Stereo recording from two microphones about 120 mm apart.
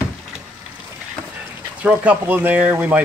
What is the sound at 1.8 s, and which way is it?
Speech, 15° right (ahead or behind).